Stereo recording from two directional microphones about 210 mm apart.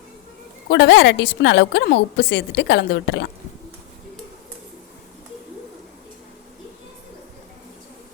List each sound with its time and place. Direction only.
0.7 s a woman's voice: 60° left (ahead or behind)